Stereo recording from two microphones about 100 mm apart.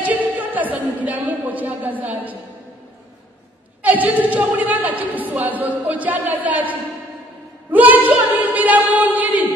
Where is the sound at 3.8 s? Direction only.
15° right (ahead or behind).